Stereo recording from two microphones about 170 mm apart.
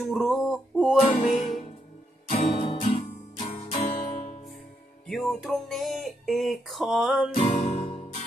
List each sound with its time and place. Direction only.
0.0 s music: centre (ahead or behind)
1.0 s music: 45° left (ahead or behind)
5.0 s music: centre (ahead or behind)
7.3 s music: 40° left (ahead or behind)